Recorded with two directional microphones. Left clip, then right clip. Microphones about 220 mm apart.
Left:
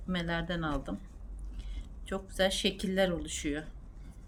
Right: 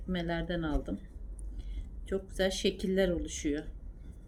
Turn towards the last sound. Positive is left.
turn(degrees=55)  # may be behind; listen again after turning